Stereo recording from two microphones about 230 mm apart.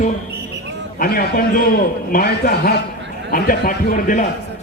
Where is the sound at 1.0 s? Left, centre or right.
Left.